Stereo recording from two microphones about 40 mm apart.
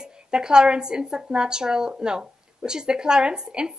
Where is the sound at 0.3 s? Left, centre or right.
Centre.